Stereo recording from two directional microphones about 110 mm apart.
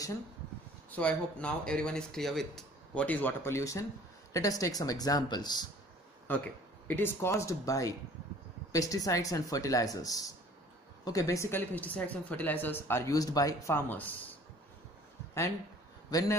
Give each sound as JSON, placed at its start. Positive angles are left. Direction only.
{"t": 0.8, "sound": "speech", "side_deg": 15}
{"t": 6.2, "sound": "a woman's voice", "side_deg": 15}
{"t": 13.7, "sound": "speech", "side_deg": 15}
{"t": 16.1, "sound": "speech", "side_deg": 30}